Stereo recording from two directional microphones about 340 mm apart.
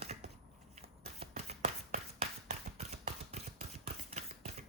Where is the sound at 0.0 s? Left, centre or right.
Centre.